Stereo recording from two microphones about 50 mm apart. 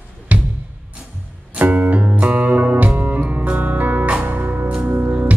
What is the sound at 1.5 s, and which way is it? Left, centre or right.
Music, right.